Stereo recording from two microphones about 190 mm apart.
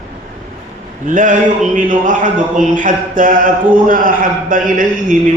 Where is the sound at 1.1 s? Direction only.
45° right (ahead or behind).